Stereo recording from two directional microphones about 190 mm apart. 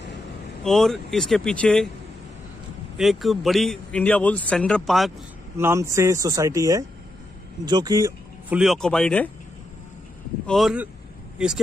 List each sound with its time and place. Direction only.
0.7 s speech: centre (ahead or behind)
3.0 s speech: centre (ahead or behind)
5.6 s speech: 15° right (ahead or behind)
8.5 s speech: 5° right (ahead or behind)
10.4 s speech: centre (ahead or behind)